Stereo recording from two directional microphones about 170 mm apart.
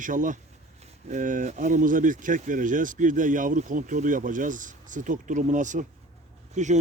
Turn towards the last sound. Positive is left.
turn(degrees=-45)  # may be behind; listen again after turning